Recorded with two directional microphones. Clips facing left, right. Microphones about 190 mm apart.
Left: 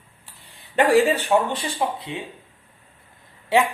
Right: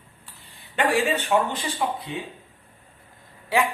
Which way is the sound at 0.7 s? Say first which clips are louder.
Left 6 dB; 40° left (ahead or behind).